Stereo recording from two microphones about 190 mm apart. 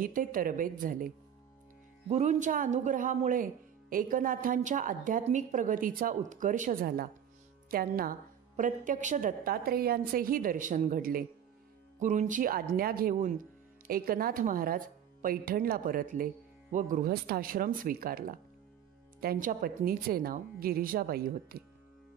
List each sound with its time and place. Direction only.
0.0 s a woman's voice: 45° right (ahead or behind)
2.0 s a woman's voice: 35° right (ahead or behind); by 21.6 s 50° right (ahead or behind)